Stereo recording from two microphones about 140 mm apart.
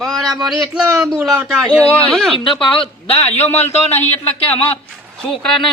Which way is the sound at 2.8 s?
45° left (ahead or behind).